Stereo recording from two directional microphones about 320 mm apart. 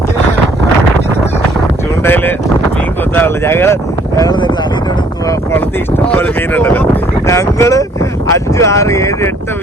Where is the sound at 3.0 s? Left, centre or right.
Centre.